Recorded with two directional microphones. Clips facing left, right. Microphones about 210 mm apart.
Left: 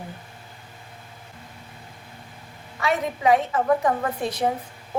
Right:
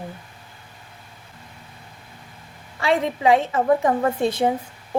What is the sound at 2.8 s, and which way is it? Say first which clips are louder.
A woman's voice: right 3 dB; 25° right (ahead or behind).